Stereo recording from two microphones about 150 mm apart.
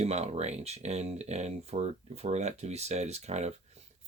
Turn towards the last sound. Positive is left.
turn(degrees=-45)  # may be behind; listen again after turning